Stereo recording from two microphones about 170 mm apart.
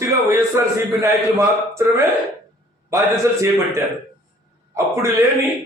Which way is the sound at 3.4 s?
15° right (ahead or behind).